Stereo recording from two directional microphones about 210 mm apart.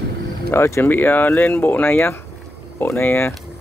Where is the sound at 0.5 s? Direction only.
10° left (ahead or behind).